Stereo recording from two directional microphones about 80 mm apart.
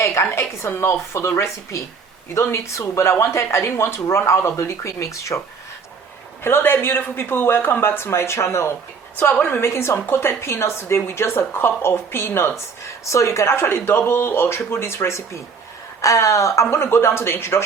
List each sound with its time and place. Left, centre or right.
0.0 s speech: left
2.3 s speech: left
6.4 s speech: left